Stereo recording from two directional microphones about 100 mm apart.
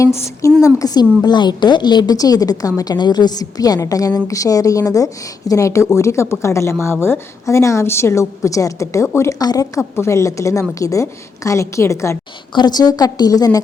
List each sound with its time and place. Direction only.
0.0 s a woman's voice: 30° left (ahead or behind)
12.5 s a woman's voice: 45° left (ahead or behind)